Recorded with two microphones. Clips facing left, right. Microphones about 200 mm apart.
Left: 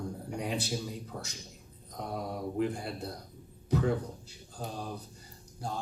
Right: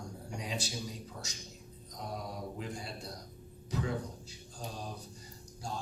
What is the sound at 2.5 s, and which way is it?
Speech, 55° left (ahead or behind).